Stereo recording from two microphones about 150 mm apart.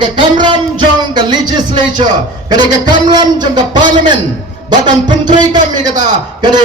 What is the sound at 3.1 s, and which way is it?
Speech, 30° right (ahead or behind).